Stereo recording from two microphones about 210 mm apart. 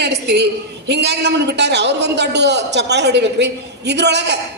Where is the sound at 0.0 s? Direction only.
55° right (ahead or behind).